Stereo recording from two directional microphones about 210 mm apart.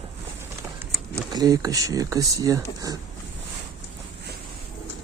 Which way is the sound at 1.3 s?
15° right (ahead or behind).